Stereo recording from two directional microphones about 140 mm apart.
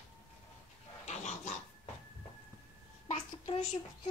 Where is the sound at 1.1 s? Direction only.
55° left (ahead or behind).